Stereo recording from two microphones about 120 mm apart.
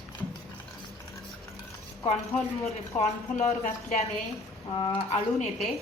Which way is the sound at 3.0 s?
70° left (ahead or behind).